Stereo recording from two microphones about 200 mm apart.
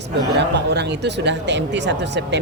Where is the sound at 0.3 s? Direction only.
60° right (ahead or behind).